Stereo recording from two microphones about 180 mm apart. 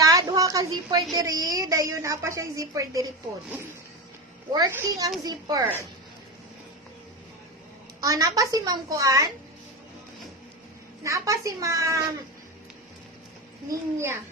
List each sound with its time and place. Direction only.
0.0 s a sound: 20° right (ahead or behind)
1.1 s a woman's voice: 20° right (ahead or behind)
4.5 s a woman's voice: 20° right (ahead or behind)
8.0 s a woman's voice: 20° right (ahead or behind)
11.0 s speech: 15° right (ahead or behind)
13.7 s speech: 15° right (ahead or behind)